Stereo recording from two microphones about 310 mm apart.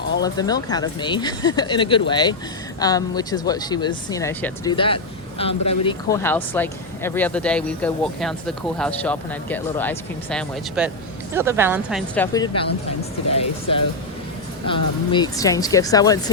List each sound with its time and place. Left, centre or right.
0.2 s speech: centre
13.3 s music: centre
14.7 s speech: centre